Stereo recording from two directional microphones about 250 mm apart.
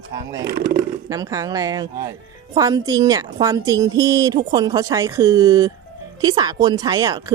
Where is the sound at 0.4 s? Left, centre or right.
Right.